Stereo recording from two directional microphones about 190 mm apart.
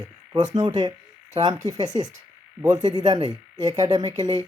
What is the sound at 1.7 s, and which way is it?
Speech, 20° right (ahead or behind).